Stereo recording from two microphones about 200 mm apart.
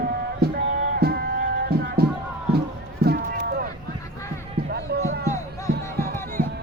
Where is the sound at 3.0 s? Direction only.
50° right (ahead or behind).